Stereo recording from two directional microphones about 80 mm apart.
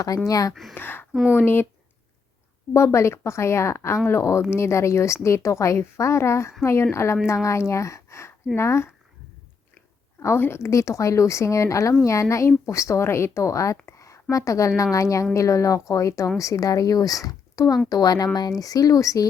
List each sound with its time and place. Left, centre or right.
0.3 s speech: left
0.7 s speech: left
1.1 s speech: centre
1.4 s speech: left
2.7 s a woman's voice: left
10.2 s a woman's voice: left